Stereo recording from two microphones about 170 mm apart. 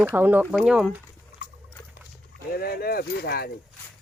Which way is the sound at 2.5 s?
65° left (ahead or behind).